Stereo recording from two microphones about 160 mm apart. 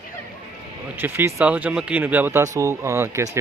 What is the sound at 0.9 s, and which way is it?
Speech, 15° right (ahead or behind).